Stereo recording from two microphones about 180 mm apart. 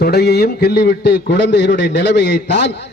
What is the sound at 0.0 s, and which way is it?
A man's voice, 65° left (ahead or behind).